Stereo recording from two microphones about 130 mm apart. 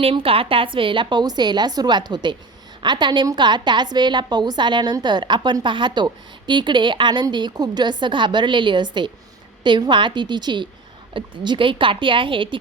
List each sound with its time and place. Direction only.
0.0 s a woman's voice: 45° right (ahead or behind)